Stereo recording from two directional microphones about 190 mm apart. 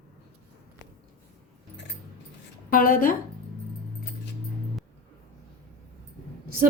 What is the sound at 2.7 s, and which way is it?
Speech, 45° left (ahead or behind).